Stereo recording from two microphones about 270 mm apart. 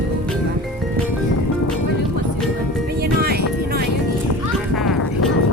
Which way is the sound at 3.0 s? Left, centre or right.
Right.